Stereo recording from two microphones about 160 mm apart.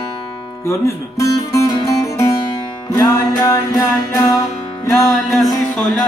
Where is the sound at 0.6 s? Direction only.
15° left (ahead or behind).